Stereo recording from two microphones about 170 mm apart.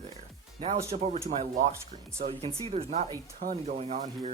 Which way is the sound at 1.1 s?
40° right (ahead or behind).